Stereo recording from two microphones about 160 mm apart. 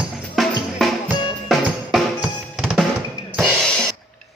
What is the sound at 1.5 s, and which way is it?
Drum, centre (ahead or behind).